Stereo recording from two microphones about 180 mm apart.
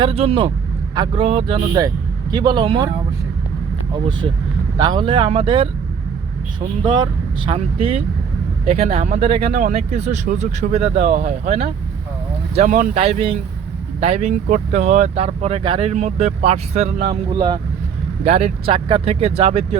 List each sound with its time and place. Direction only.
0.0 s speech: 30° right (ahead or behind)
4.8 s speech: 25° right (ahead or behind)
6.8 s speech: 25° right (ahead or behind)
10.9 s speech: 55° right (ahead or behind)
11.3 s speech: 35° right (ahead or behind)
17.2 s speech: 25° right (ahead or behind)
18.3 s speech: 35° right (ahead or behind)